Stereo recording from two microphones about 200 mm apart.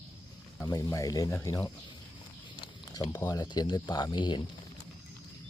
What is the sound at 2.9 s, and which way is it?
Speech, 20° left (ahead or behind).